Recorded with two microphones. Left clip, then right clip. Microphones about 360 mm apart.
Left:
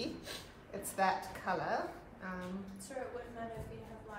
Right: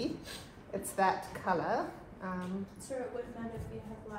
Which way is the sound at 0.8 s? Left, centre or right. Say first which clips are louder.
Right 3 dB; centre.